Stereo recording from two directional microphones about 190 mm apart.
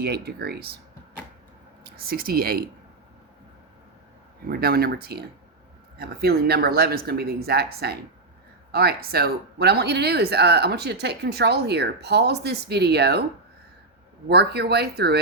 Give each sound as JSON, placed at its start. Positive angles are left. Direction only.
{"t": 0.0, "sound": "speech", "side_deg": -55}
{"t": 1.8, "sound": "speech", "side_deg": -55}
{"t": 4.4, "sound": "speech", "side_deg": -55}
{"t": 14.3, "sound": "speech", "side_deg": -60}